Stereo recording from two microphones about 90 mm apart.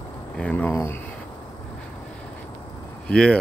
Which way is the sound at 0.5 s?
25° left (ahead or behind).